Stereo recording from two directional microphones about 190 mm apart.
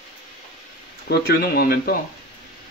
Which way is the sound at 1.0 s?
55° left (ahead or behind).